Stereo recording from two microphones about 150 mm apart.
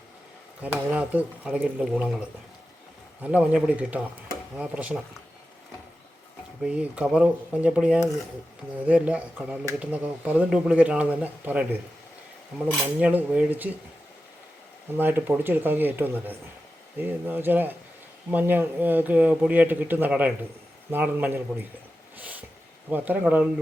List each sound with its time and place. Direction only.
0.6 s speech: 10° right (ahead or behind)
3.2 s speech: 10° right (ahead or behind)
6.6 s speech: 5° right (ahead or behind)
14.9 s speech: 15° right (ahead or behind)
22.2 s a sound: 10° right (ahead or behind)
22.9 s speech: 10° right (ahead or behind)